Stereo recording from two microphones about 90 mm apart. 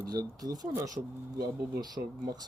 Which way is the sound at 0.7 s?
30° right (ahead or behind).